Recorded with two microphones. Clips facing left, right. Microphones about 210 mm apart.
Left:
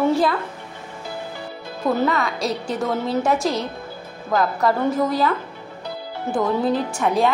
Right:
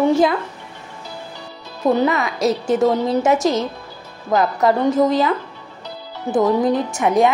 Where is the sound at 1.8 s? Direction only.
20° right (ahead or behind).